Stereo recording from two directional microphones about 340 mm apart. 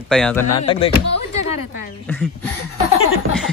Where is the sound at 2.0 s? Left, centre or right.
Centre.